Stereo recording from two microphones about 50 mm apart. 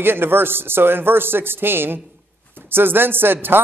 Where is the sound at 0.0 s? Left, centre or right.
Right.